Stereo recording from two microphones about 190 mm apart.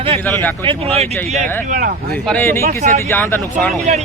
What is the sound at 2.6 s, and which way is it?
Speech, 45° right (ahead or behind).